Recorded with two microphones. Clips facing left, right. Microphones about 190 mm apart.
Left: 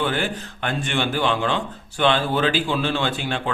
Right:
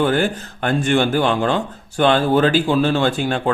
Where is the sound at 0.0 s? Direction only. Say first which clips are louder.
Right 6 dB; 45° right (ahead or behind).